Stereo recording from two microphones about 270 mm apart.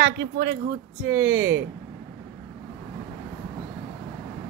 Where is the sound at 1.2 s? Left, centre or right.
Right.